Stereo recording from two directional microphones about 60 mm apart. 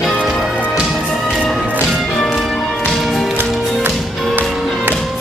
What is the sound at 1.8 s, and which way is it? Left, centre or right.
Music, centre.